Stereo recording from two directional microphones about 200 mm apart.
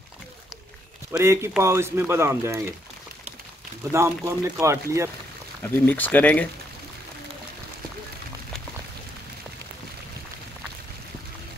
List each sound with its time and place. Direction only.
1.1 s speech: 15° right (ahead or behind)
3.9 s speech: 15° right (ahead or behind)
5.6 s speech: 10° left (ahead or behind)